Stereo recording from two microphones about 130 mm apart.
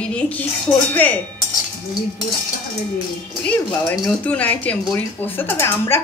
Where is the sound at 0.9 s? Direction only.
10° left (ahead or behind).